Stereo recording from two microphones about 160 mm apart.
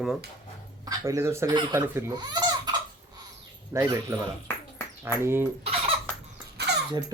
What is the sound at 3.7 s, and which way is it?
Speech, 20° right (ahead or behind).